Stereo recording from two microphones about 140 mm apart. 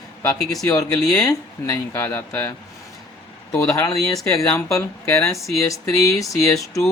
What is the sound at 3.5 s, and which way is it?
Speech, 15° left (ahead or behind).